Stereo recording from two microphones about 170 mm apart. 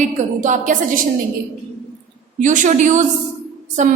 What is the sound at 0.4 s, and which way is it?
Speech, 50° right (ahead or behind).